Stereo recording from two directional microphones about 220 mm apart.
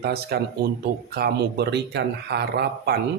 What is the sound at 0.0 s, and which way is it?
Speech, 45° right (ahead or behind).